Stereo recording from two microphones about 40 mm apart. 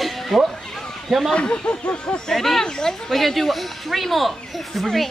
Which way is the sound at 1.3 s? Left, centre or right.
Left.